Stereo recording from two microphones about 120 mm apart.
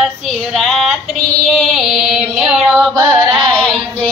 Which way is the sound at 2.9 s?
25° right (ahead or behind).